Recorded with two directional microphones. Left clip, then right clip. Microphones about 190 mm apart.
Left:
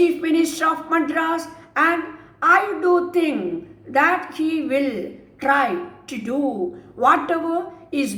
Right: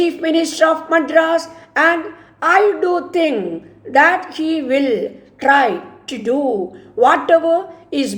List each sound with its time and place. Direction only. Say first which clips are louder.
0.0 s a woman's voice: right 2 dB; 40° right (ahead or behind)